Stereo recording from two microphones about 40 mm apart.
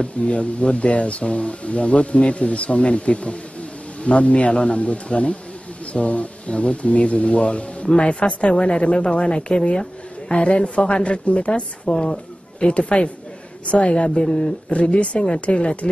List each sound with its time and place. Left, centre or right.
0.0 s a woman's voice: left